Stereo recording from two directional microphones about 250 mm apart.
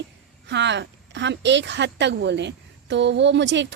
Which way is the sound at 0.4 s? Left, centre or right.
Right.